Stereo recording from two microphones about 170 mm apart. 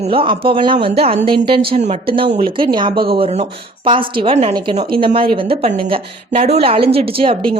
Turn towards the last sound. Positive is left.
turn(degrees=-35)  # may be behind; listen again after turning